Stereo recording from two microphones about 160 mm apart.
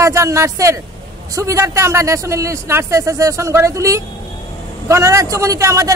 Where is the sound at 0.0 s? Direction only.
20° right (ahead or behind).